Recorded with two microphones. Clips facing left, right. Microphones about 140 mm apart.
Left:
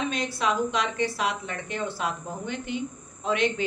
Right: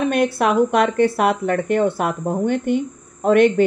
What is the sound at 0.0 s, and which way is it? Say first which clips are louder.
Speech: right 10 dB; 60° right (ahead or behind).